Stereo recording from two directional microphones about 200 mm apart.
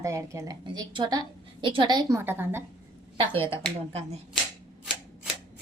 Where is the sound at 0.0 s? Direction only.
15° right (ahead or behind).